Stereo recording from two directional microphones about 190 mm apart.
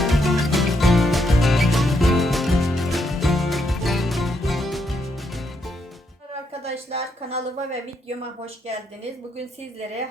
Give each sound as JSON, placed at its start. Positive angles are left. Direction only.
{"t": 0.0, "sound": "music", "side_deg": 0}
{"t": 6.6, "sound": "a woman's voice", "side_deg": -35}